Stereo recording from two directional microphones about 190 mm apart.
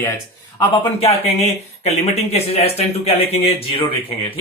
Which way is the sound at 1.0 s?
35° left (ahead or behind).